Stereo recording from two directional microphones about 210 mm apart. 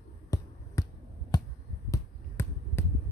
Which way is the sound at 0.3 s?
15° left (ahead or behind).